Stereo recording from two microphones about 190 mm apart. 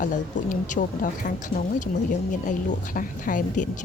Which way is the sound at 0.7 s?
45° left (ahead or behind).